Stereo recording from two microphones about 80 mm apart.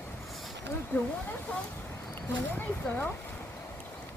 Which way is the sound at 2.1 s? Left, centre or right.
Left.